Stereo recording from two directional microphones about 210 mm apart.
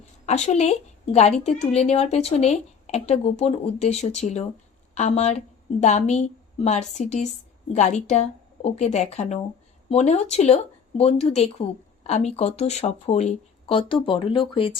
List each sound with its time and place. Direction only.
0.3 s a woman's voice: 30° left (ahead or behind)